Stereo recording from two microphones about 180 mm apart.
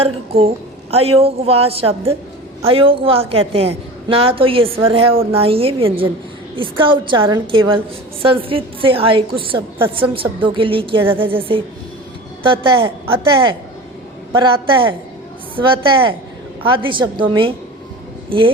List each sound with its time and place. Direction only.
0.0 s a woman's voice: 35° right (ahead or behind)